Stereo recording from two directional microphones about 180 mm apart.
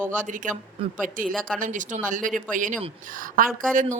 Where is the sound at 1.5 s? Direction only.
45° right (ahead or behind).